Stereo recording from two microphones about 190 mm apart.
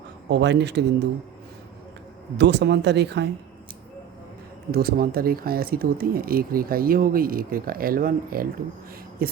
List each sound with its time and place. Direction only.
0.3 s speech: 65° right (ahead or behind)
2.4 s speech: 65° right (ahead or behind)
4.7 s speech: 55° right (ahead or behind)